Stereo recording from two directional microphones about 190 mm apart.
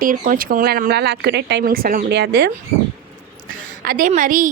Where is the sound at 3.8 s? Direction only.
45° right (ahead or behind).